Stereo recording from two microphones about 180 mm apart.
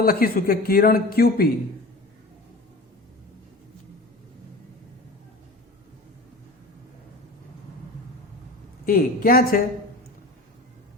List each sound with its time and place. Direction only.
0.0 s speech: 55° left (ahead or behind)
8.9 s a woman's voice: 55° left (ahead or behind)